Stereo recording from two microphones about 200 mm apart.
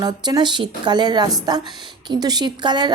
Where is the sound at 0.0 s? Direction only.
20° right (ahead or behind).